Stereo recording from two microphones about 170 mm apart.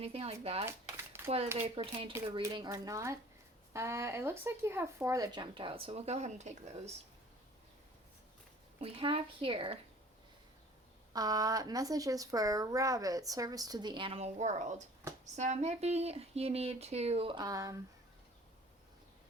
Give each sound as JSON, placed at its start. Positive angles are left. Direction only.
{"t": 0.0, "sound": "speech", "side_deg": -35}
{"t": 2.4, "sound": "speech", "side_deg": -20}
{"t": 8.8, "sound": "speech", "side_deg": -35}
{"t": 11.1, "sound": "speech", "side_deg": -20}